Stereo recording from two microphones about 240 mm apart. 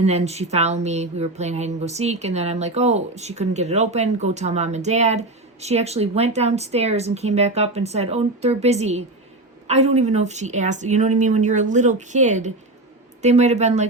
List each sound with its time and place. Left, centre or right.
0.0 s speech: right